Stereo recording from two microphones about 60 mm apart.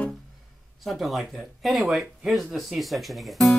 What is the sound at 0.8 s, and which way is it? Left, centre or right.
Speech, centre.